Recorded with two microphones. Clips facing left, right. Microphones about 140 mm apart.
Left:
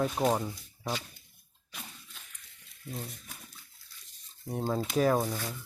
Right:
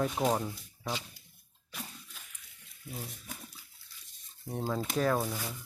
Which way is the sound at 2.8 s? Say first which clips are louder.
Left 2 dB; 5° right (ahead or behind).